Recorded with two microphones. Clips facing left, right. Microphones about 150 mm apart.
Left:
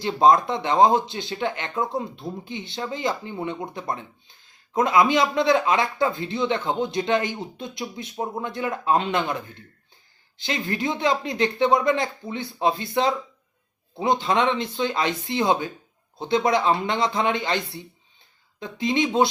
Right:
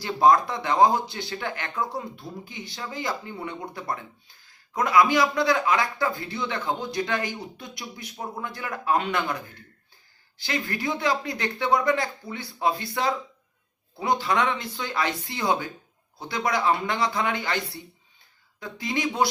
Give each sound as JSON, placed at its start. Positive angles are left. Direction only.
{"t": 0.0, "sound": "speech", "side_deg": 25}